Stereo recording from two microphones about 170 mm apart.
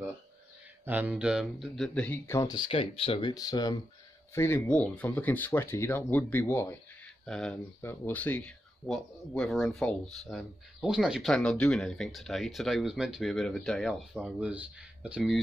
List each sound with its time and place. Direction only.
0.8 s speech: 10° right (ahead or behind); by 2.6 s 20° left (ahead or behind)
2.7 s speech: 30° left (ahead or behind); by 15.4 s 5° right (ahead or behind)